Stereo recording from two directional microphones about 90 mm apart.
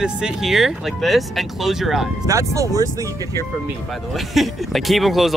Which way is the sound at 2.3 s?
35° right (ahead or behind).